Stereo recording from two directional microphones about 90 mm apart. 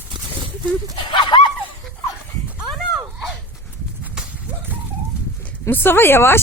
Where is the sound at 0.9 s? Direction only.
65° left (ahead or behind).